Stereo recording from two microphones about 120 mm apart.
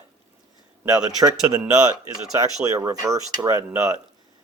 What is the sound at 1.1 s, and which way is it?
Speech, 30° right (ahead or behind).